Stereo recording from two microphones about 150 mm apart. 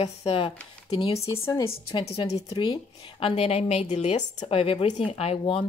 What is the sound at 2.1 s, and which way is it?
A woman's voice, 45° left (ahead or behind).